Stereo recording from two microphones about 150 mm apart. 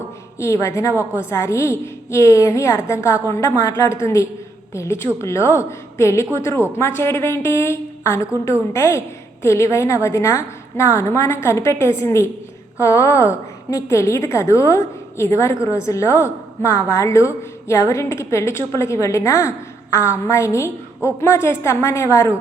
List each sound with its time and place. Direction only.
0.3 s a woman's voice: 20° left (ahead or behind)